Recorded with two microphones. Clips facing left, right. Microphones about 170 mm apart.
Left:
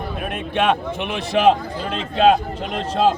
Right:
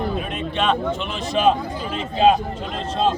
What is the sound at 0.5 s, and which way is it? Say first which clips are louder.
A man's voice: left 2 dB; 60° left (ahead or behind).